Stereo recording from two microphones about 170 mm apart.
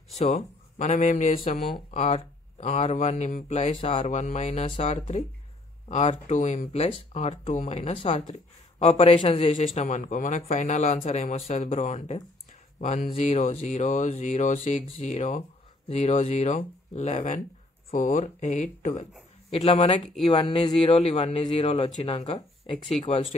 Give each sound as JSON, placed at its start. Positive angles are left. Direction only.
{"t": 0.1, "sound": "a man's voice", "side_deg": 45}
{"t": 19.5, "sound": "a man's voice", "side_deg": 35}